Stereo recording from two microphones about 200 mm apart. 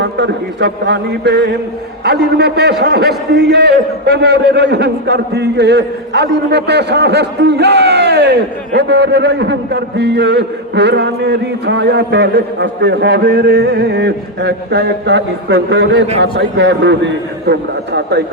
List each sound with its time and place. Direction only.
0.0 s a man's voice: 60° right (ahead or behind)